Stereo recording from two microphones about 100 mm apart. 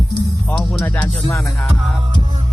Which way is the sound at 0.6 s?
5° left (ahead or behind).